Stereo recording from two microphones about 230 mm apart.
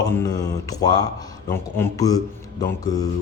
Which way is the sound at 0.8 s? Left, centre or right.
Centre.